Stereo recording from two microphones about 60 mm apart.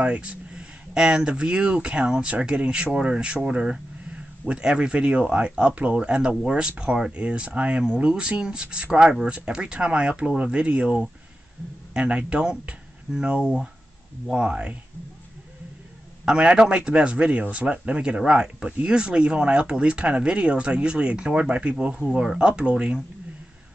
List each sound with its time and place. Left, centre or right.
0.0 s speech: centre
16.3 s speech: centre